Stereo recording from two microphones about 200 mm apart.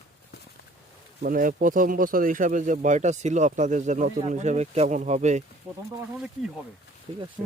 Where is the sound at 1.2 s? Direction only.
45° right (ahead or behind).